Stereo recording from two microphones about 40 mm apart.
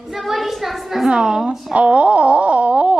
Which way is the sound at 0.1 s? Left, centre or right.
Centre.